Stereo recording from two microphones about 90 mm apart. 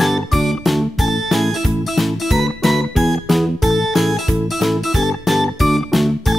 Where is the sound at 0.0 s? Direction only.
Centre (ahead or behind).